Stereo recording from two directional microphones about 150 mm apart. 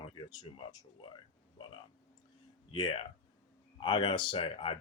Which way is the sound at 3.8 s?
30° left (ahead or behind).